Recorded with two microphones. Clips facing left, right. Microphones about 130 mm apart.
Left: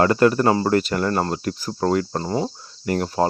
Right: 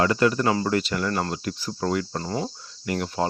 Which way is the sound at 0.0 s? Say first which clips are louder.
Left 5 dB; 45° left (ahead or behind).